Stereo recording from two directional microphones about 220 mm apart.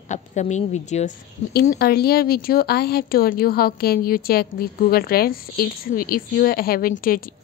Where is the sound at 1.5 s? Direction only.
45° left (ahead or behind).